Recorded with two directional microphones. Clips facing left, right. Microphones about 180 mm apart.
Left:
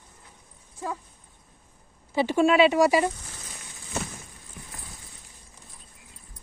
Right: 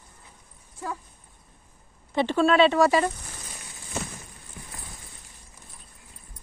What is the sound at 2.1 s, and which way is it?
Speech, 10° left (ahead or behind).